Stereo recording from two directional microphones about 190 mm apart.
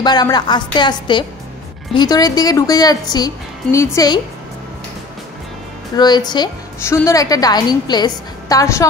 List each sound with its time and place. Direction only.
0.0 s a woman's voice: 20° left (ahead or behind)
5.9 s a woman's voice: 20° left (ahead or behind)